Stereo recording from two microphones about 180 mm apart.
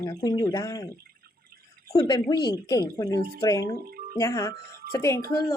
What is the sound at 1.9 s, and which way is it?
Speech, 20° left (ahead or behind).